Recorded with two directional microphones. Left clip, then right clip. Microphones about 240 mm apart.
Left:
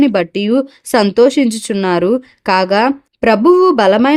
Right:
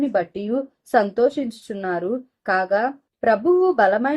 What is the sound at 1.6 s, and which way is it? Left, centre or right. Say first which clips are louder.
Speech: left 9 dB; left.